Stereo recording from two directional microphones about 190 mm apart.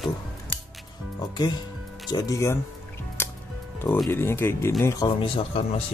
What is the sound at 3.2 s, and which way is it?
Music, 10° left (ahead or behind).